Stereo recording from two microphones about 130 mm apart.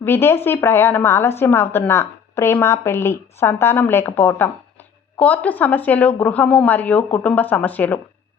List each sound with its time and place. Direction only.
0.0 s a woman's voice: 15° left (ahead or behind)